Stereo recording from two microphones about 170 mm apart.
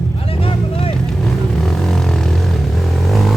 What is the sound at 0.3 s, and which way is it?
Vehicle, 35° left (ahead or behind).